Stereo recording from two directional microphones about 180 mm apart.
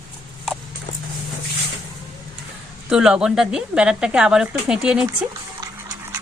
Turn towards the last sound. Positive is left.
turn(degrees=-20)  # may be behind; listen again after turning